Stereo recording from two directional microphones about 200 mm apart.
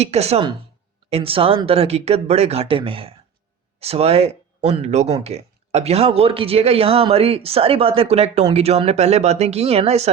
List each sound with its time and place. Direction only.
0.0 s speech: 30° right (ahead or behind)